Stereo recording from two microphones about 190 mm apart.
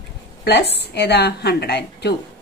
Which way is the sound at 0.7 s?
60° left (ahead or behind).